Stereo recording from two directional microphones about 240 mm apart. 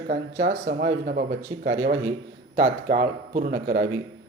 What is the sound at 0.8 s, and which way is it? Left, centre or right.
A man's voice, right.